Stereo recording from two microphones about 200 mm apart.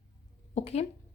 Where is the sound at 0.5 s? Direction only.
30° left (ahead or behind).